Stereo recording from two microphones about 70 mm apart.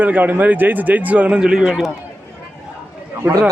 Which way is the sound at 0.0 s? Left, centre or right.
Right.